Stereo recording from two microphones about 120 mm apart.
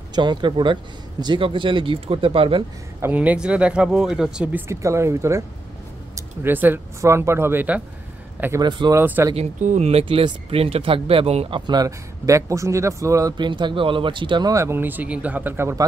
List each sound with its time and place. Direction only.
0.1 s speech: 40° right (ahead or behind)
3.0 s speech: 15° right (ahead or behind)
4.6 s speech: 25° right (ahead or behind)
8.5 s speech: 35° right (ahead or behind)
8.9 s speech: 20° right (ahead or behind)
9.3 s speech: 75° right (ahead or behind); by 11.6 s 55° right (ahead or behind)
11.6 s speech: 35° right (ahead or behind)
13.4 s speech: 40° right (ahead or behind)
14.5 s speech: 25° right (ahead or behind)